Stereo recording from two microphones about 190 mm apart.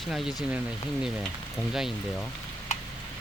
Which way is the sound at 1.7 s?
Centre (ahead or behind).